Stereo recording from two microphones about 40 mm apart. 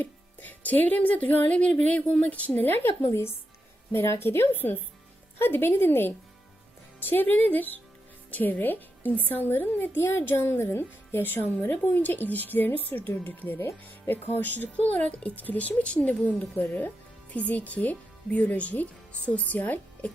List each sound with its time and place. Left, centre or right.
0.0 s speech: left
2.5 s a woman's voice: left
3.9 s a woman's voice: left
11.2 s a woman's voice: left
15.8 s speech: left